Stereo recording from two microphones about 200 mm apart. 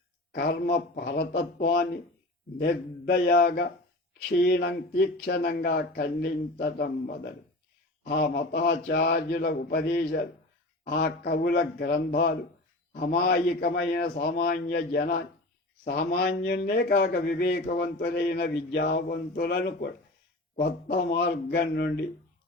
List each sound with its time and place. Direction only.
0.3 s a man's voice: 50° left (ahead or behind)